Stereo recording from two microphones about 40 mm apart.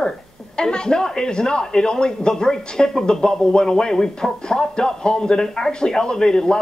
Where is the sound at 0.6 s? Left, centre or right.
Left.